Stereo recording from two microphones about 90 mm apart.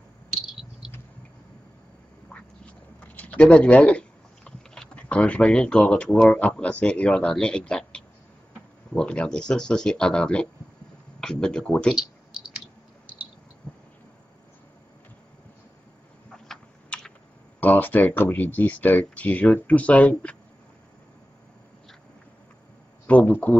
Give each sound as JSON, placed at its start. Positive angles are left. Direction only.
{"t": 0.3, "sound": "a sound", "side_deg": -5}
{"t": 3.2, "sound": "speech", "side_deg": 15}
{"t": 11.9, "sound": "clicking", "side_deg": -5}
{"t": 16.3, "sound": "typing", "side_deg": 5}
{"t": 17.6, "sound": "speech", "side_deg": 20}
{"t": 23.0, "sound": "a sound", "side_deg": 15}